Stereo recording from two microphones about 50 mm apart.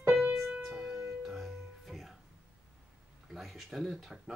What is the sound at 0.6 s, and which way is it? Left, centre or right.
Music, centre.